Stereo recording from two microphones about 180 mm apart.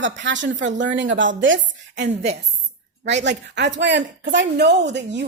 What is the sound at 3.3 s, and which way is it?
A woman's voice, 75° right (ahead or behind).